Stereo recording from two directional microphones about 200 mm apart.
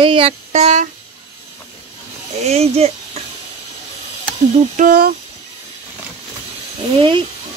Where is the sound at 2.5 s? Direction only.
30° right (ahead or behind).